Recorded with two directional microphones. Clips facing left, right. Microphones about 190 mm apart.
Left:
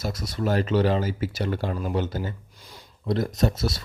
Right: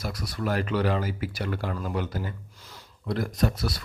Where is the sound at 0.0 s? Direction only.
25° left (ahead or behind).